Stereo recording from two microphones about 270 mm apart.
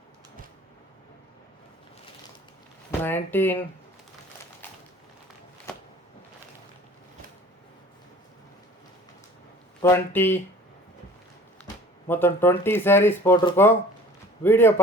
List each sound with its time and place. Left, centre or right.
3.0 s speech: centre
9.8 s speech: centre
12.0 s speech: centre